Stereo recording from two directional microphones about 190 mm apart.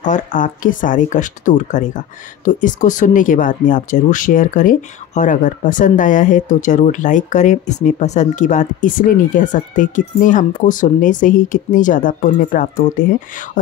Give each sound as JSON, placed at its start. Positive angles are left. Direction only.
{"t": 0.0, "sound": "speech", "side_deg": 40}